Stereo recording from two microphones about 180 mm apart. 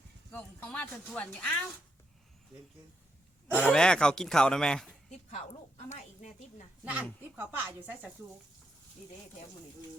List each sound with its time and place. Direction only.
0.3 s speech: 10° left (ahead or behind)
3.5 s speech: 5° left (ahead or behind)
5.1 s a woman's voice: 40° left (ahead or behind)
6.8 s speech: 10° right (ahead or behind)